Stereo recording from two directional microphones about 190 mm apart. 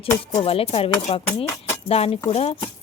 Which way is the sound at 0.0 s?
30° left (ahead or behind).